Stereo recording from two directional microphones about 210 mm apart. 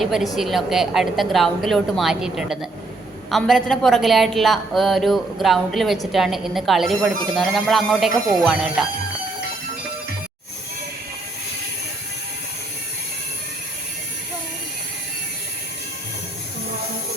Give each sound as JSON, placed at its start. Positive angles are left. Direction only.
{"t": 0.0, "sound": "a woman's voice", "side_deg": 0}